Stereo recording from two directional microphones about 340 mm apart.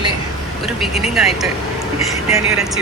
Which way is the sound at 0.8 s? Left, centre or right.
Centre.